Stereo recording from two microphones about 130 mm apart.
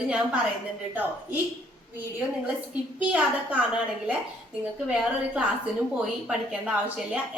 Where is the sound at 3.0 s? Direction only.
10° right (ahead or behind).